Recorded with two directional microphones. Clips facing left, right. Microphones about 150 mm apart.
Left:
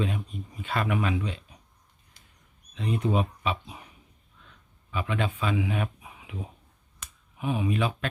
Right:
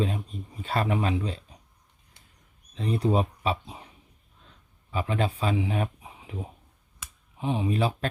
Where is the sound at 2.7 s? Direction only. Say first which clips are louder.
Right 2 dB; 35° right (ahead or behind).